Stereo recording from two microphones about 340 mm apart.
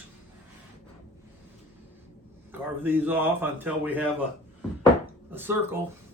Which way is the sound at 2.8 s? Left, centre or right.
Centre.